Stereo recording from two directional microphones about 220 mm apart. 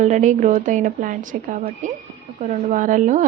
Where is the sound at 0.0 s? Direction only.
35° right (ahead or behind).